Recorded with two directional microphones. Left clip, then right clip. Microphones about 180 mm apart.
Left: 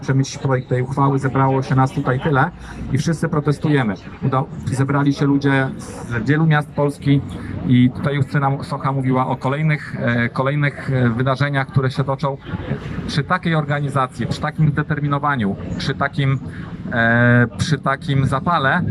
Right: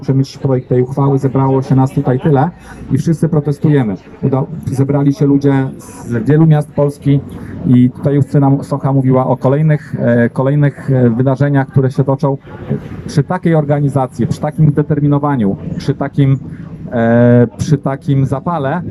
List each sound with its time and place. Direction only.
0.1 s speech: 30° right (ahead or behind)